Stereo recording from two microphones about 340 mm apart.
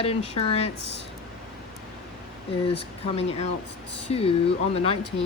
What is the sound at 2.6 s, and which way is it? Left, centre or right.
Speech, centre.